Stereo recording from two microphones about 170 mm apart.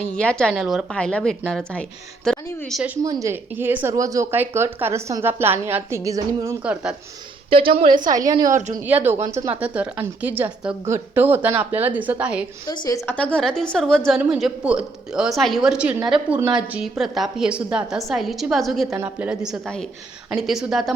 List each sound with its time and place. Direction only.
0.2 s a woman's voice: 5° left (ahead or behind)
3.0 s a woman's voice: 20° right (ahead or behind)
6.6 s a woman's voice: 5° right (ahead or behind)
7.9 s a woman's voice: 50° right (ahead or behind)
8.2 s a woman's voice: 20° right (ahead or behind)
8.5 s a woman's voice: 45° right (ahead or behind)
8.8 s a woman's voice: 10° right (ahead or behind)
12.6 s a woman's voice: 25° left (ahead or behind)
13.1 s a woman's voice: 5° left (ahead or behind)